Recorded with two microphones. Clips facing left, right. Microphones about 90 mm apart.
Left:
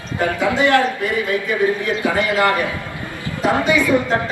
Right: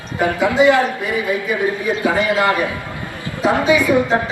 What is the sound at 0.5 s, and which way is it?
Speech, 15° right (ahead or behind).